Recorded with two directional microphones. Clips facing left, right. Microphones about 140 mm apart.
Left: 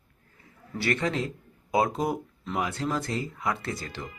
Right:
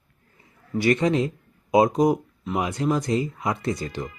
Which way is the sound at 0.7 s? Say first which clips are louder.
Right 7 dB; 15° right (ahead or behind).